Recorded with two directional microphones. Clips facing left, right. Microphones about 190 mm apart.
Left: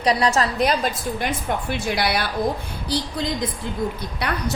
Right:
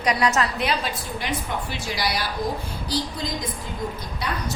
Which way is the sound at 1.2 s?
55° left (ahead or behind).